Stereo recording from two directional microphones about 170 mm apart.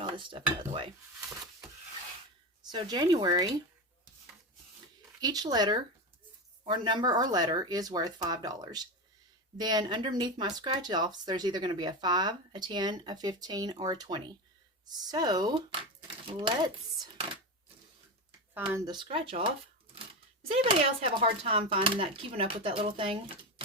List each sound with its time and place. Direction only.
0.0 s speech: 30° right (ahead or behind)
2.6 s speech: 25° right (ahead or behind)
5.2 s speech: 25° right (ahead or behind)
18.5 s speech: 10° right (ahead or behind)
18.9 s speech: 30° right (ahead or behind)